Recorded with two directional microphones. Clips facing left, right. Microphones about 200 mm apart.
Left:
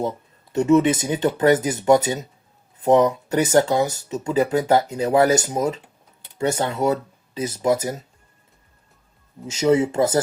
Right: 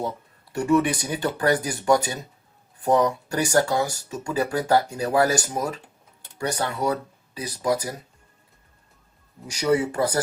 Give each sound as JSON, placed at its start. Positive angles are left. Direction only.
{"t": 0.5, "sound": "speech", "side_deg": 20}
{"t": 9.5, "sound": "speech", "side_deg": 25}